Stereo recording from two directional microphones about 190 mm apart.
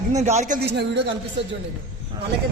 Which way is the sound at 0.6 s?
65° right (ahead or behind).